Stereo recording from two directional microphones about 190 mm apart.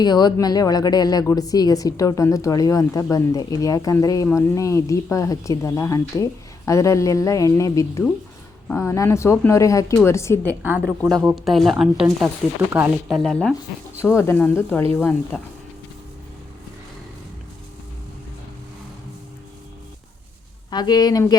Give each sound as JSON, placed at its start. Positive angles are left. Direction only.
{"t": 0.0, "sound": "speech", "side_deg": 20}
{"t": 10.6, "sound": "speech", "side_deg": -10}
{"t": 13.1, "sound": "speech", "side_deg": 0}
{"t": 14.0, "sound": "speech", "side_deg": 15}
{"t": 20.7, "sound": "speech", "side_deg": 20}